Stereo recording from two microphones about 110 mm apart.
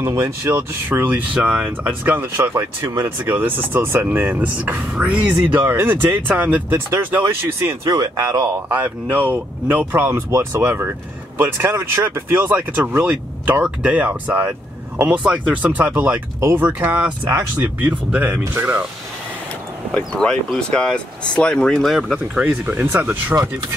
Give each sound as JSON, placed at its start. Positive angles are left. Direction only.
{"t": 0.0, "sound": "speech", "side_deg": -25}
{"t": 5.6, "sound": "speech", "side_deg": -20}
{"t": 7.8, "sound": "speech", "side_deg": -35}
{"t": 8.6, "sound": "speech", "side_deg": -15}
{"t": 20.2, "sound": "speech", "side_deg": 5}
{"t": 22.7, "sound": "speech", "side_deg": -20}